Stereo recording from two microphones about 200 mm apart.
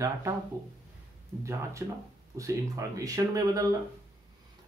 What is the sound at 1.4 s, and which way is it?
Speech, 15° right (ahead or behind).